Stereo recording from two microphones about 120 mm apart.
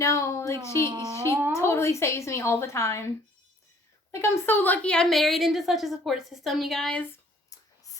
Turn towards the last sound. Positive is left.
turn(degrees=30)  # may be behind; listen again after turning